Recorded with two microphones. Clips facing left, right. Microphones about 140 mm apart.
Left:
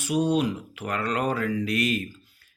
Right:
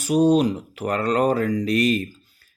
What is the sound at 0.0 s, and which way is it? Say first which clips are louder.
Speech: right 6 dB; 40° right (ahead or behind).